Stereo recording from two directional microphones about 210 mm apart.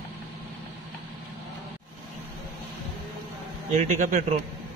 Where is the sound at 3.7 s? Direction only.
35° right (ahead or behind).